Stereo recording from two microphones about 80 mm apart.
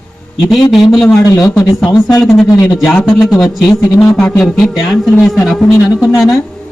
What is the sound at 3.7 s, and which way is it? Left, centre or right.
Speech, left.